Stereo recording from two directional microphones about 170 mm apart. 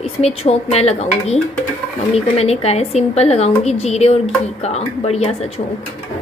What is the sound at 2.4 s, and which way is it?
A woman's voice, 40° left (ahead or behind).